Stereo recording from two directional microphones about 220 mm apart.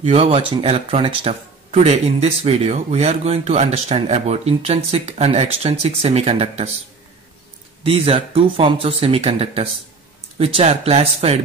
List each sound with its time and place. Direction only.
0.0 s speech: 25° right (ahead or behind)
7.8 s speech: 25° right (ahead or behind)